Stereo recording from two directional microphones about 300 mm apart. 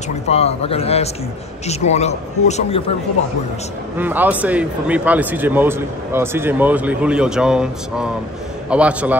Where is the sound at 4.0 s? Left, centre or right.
Centre.